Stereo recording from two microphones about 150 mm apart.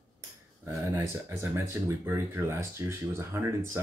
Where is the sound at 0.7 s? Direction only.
15° right (ahead or behind).